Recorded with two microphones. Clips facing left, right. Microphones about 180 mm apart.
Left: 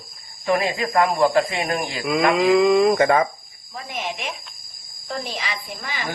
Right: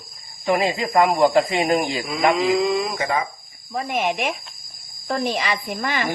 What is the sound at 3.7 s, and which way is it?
Speech, 55° right (ahead or behind).